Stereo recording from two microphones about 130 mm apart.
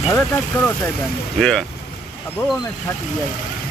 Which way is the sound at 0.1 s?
10° left (ahead or behind).